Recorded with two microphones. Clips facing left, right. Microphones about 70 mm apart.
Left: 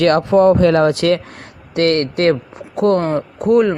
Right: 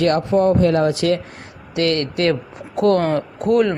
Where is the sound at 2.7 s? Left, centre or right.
Left.